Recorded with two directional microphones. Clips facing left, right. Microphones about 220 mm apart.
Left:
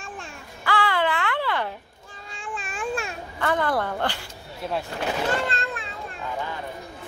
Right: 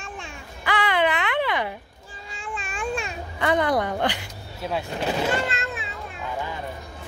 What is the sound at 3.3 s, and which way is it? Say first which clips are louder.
Speech: right 2 dB; 15° right (ahead or behind).